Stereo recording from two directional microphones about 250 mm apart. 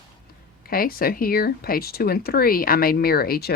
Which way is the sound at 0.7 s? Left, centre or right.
Left.